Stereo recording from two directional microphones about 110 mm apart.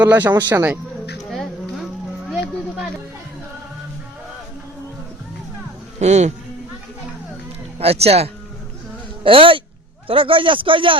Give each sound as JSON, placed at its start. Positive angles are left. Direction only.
{"t": 0.0, "sound": "speech", "side_deg": -15}
{"t": 1.3, "sound": "music", "side_deg": 0}
{"t": 6.0, "sound": "speech", "side_deg": -90}
{"t": 7.8, "sound": "speech", "side_deg": -65}
{"t": 9.2, "sound": "speech", "side_deg": -55}